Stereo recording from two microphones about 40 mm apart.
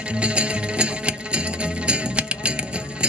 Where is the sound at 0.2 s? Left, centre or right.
Right.